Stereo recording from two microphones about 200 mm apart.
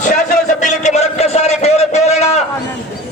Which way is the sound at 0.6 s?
35° left (ahead or behind).